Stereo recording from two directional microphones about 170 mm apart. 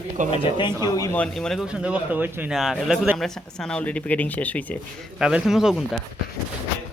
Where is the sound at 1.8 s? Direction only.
10° right (ahead or behind); by 4.6 s 10° left (ahead or behind).